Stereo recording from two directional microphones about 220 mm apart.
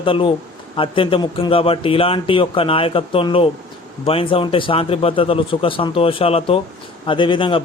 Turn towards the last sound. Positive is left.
turn(degrees=20)  # may be behind; listen again after turning